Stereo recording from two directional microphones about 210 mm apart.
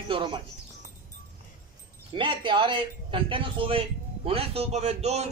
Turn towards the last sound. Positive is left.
turn(degrees=-30)  # may be behind; listen again after turning